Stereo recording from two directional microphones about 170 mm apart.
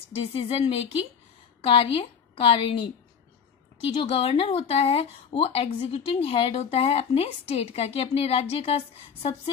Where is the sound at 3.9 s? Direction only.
30° left (ahead or behind).